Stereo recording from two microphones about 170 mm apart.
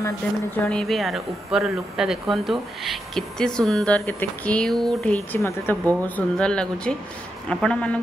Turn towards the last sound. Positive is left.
turn(degrees=5)  # may be behind; listen again after turning